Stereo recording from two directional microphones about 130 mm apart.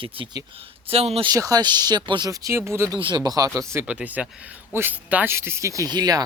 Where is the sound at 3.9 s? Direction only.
10° right (ahead or behind).